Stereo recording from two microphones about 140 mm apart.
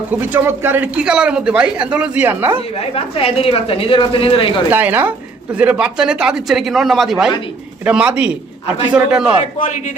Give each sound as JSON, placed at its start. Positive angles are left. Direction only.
{"t": 0.1, "sound": "a man's voice", "side_deg": -15}
{"t": 2.7, "sound": "a woman's voice", "side_deg": 45}
{"t": 4.7, "sound": "a man's voice", "side_deg": -15}
{"t": 9.4, "sound": "a man's voice", "side_deg": 60}